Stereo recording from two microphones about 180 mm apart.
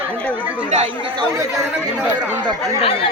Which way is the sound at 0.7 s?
35° right (ahead or behind).